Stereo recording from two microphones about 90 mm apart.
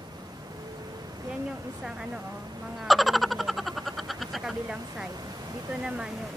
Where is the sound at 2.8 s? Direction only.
Centre (ahead or behind).